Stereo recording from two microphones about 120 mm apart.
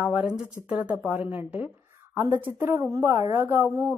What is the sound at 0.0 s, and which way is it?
A woman's voice, 10° right (ahead or behind).